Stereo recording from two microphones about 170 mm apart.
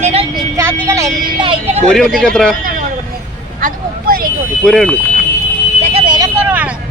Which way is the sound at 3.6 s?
55° right (ahead or behind).